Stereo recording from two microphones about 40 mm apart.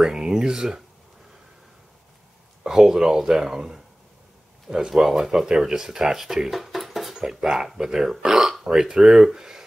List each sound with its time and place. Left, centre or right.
0.0 s speech: centre
2.6 s speech: centre
7.2 s speech: centre